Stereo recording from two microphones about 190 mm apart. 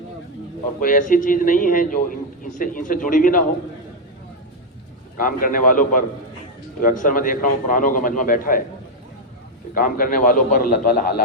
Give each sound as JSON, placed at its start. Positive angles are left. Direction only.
{"t": 0.8, "sound": "a man's voice", "side_deg": 45}
{"t": 5.2, "sound": "a man's voice", "side_deg": 45}
{"t": 9.7, "sound": "a man's voice", "side_deg": 45}